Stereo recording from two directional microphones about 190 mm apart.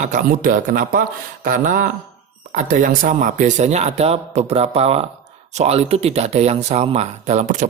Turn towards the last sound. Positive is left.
turn(degrees=-40)  # may be behind; listen again after turning